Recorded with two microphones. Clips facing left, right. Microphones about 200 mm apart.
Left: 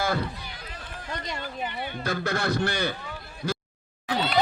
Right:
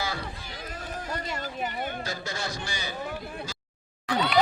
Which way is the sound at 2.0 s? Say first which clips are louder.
Left 7 dB; 60° left (ahead or behind).